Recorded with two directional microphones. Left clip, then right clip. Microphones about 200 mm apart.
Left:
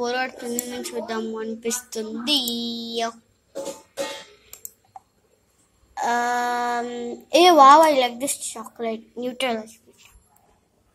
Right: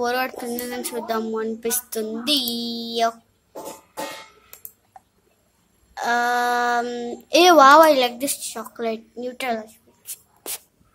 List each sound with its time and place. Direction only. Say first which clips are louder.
0.0 s speech: right 2 dB; 20° right (ahead or behind)
5.9 s a child's voice: right 2 dB; centre (ahead or behind)